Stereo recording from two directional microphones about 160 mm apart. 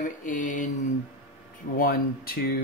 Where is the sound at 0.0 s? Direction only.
55° left (ahead or behind).